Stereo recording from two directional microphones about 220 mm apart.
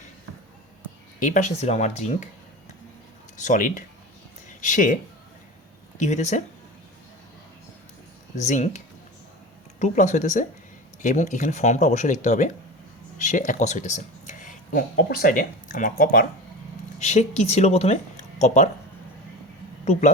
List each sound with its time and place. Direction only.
1.2 s speech: 35° left (ahead or behind)
3.3 s speech: 35° left (ahead or behind)
6.0 s speech: 30° left (ahead or behind)
8.4 s speech: 35° left (ahead or behind)
19.8 s speech: 30° left (ahead or behind)